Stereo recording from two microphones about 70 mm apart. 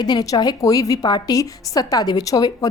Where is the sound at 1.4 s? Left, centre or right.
Left.